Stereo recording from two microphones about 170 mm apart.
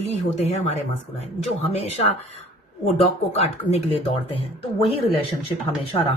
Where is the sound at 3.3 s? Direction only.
40° left (ahead or behind).